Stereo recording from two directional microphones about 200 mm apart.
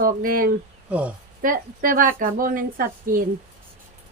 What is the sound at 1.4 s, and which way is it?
A woman's voice, 45° right (ahead or behind).